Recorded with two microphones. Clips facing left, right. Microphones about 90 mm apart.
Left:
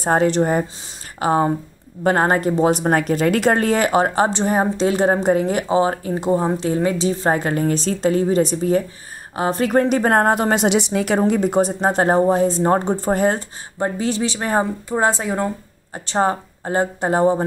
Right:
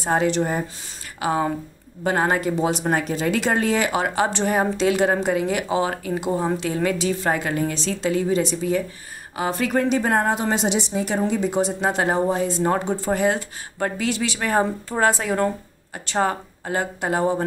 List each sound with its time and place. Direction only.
0.0 s a woman's voice: 45° left (ahead or behind)
4.3 s a woman's voice: 30° left (ahead or behind); by 11.1 s 75° left (ahead or behind)
11.1 s a woman's voice: 50° left (ahead or behind)
13.7 s speech: 30° left (ahead or behind)
14.6 s speech: 20° left (ahead or behind)